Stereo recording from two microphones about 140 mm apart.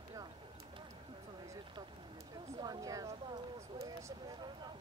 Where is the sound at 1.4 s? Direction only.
30° right (ahead or behind).